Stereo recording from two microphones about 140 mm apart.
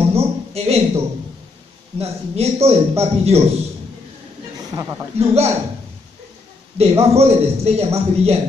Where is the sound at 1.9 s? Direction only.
50° right (ahead or behind).